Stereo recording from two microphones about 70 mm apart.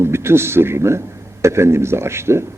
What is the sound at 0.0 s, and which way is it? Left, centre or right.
A man's voice, right.